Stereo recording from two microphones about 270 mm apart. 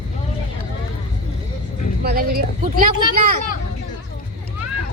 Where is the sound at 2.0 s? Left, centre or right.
Right.